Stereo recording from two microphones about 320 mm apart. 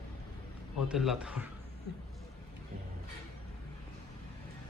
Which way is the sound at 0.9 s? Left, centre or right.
Centre.